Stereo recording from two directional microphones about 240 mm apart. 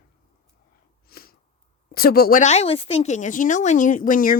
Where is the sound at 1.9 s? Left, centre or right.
Left.